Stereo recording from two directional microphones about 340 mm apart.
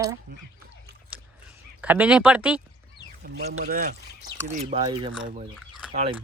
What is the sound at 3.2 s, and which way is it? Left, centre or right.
Speech, right.